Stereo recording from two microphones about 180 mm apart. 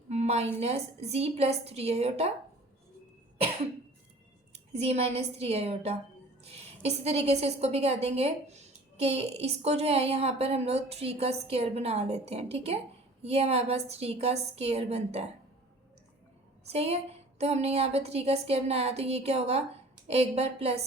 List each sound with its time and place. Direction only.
0.1 s a woman's voice: 35° right (ahead or behind)
4.5 s a woman's voice: 35° right (ahead or behind)
16.6 s a woman's voice: 35° right (ahead or behind)